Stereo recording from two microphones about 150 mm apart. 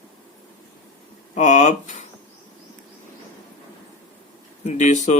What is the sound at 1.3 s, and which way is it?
Speech, 50° left (ahead or behind).